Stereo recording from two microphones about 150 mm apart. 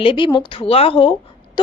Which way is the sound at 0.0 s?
35° left (ahead or behind).